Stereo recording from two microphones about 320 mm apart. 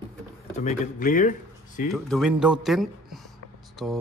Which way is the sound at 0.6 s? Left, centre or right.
Left.